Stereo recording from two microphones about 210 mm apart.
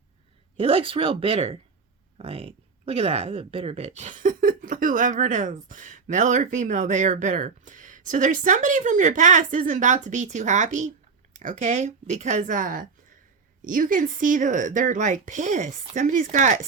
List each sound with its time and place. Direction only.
0.5 s speech: 25° right (ahead or behind)